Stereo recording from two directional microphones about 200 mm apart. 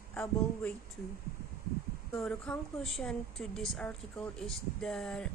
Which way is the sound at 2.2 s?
5° left (ahead or behind).